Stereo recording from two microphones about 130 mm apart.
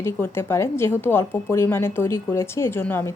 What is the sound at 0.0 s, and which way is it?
A woman's voice, 15° left (ahead or behind).